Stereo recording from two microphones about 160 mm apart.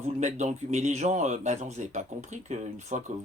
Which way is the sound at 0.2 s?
45° right (ahead or behind).